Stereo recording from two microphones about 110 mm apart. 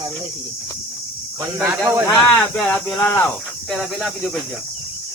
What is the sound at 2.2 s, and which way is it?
Speech, 10° left (ahead or behind).